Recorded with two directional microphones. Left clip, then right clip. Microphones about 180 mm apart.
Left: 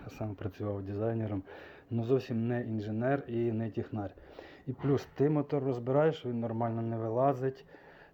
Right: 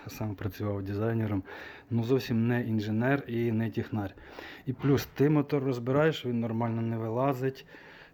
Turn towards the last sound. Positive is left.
turn(degrees=-20)  # may be behind; listen again after turning